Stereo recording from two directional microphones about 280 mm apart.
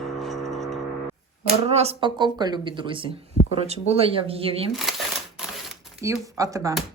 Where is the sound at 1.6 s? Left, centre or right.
Right.